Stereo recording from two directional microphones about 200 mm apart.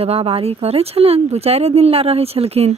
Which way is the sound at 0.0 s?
30° right (ahead or behind).